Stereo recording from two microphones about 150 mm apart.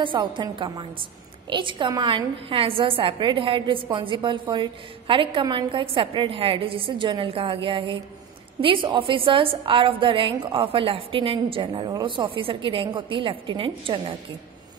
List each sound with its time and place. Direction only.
0.0 s a woman's voice: 35° right (ahead or behind)